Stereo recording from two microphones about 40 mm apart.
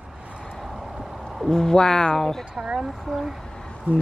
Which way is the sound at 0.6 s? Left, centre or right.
Centre.